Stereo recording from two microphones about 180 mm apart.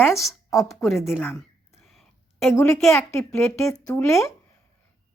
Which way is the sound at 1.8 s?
Centre (ahead or behind).